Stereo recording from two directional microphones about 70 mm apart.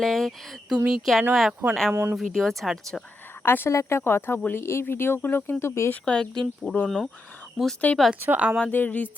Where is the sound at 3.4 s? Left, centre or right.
Left.